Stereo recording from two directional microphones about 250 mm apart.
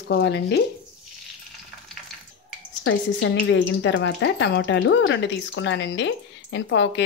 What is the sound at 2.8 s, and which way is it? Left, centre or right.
Speech, left.